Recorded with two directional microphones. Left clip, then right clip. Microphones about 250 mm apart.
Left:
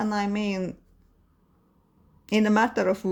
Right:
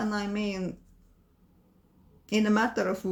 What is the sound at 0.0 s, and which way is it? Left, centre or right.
Speech, left.